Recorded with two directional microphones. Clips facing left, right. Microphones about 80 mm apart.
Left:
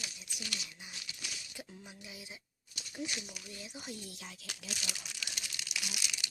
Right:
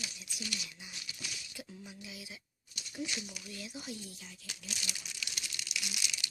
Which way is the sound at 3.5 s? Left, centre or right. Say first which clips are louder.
Right 2 dB; left.